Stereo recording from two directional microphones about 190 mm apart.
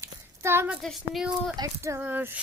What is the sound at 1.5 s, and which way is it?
Speech, 20° right (ahead or behind).